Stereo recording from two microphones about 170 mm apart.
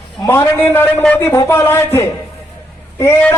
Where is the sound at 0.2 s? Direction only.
15° left (ahead or behind).